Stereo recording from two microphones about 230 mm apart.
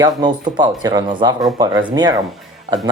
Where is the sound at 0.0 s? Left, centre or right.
Centre.